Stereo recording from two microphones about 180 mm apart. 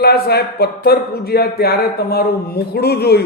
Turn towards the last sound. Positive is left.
turn(degrees=60)  # may be behind; listen again after turning